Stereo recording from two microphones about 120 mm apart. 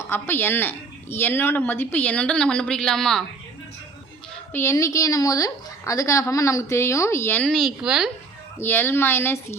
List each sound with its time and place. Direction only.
0.1 s a woman's voice: 20° left (ahead or behind)
4.5 s a woman's voice: 25° left (ahead or behind)
7.4 s a woman's voice: centre (ahead or behind)
8.5 s a woman's voice: 20° left (ahead or behind)